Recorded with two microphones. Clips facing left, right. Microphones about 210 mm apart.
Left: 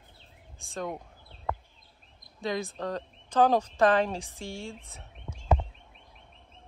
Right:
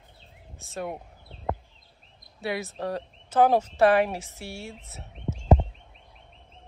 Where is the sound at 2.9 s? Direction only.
15° right (ahead or behind).